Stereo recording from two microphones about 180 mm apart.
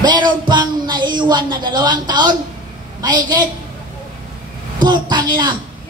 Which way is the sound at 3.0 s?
25° right (ahead or behind).